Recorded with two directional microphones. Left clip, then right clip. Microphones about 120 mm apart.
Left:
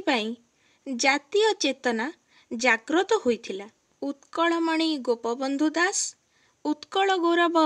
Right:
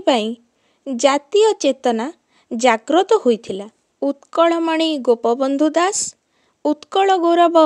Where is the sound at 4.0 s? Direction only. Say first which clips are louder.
Right 10 dB; 50° right (ahead or behind).